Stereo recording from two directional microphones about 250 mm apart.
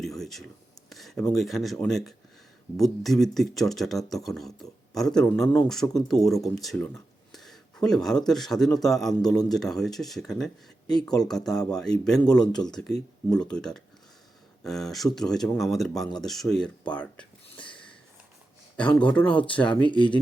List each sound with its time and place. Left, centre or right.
0.0 s a sound: centre
0.9 s speech: centre
10.9 s speech: centre
11.2 s speech: centre
17.5 s a sound: centre
18.8 s speech: centre
19.8 s speech: centre